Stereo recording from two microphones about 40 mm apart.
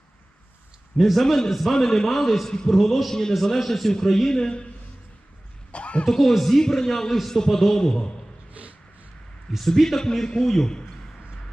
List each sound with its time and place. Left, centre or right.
0.9 s a man's voice: centre
2.5 s a man's voice: centre
2.7 s a man's voice: centre
4.4 s a man's voice: left
5.7 s a sound: left
6.1 s a man's voice: centre
8.6 s dog: right
9.6 s a man's voice: centre